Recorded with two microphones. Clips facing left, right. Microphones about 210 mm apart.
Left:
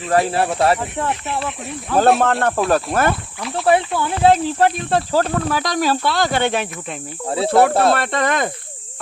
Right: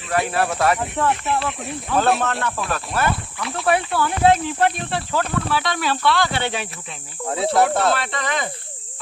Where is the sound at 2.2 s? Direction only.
55° left (ahead or behind).